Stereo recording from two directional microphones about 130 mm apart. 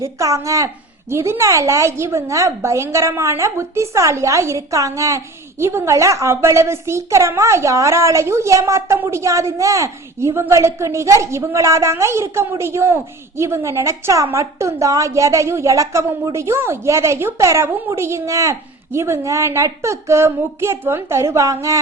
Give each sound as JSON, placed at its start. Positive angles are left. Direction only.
{"t": 0.0, "sound": "a woman's voice", "side_deg": -25}